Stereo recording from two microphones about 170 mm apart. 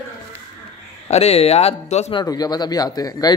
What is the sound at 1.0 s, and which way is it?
Speech, 35° left (ahead or behind).